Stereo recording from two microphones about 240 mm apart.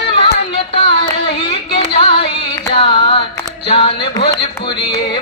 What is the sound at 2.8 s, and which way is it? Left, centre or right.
Carnatic music, left.